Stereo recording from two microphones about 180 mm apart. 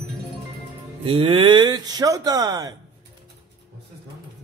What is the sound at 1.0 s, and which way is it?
Speech, 30° right (ahead or behind).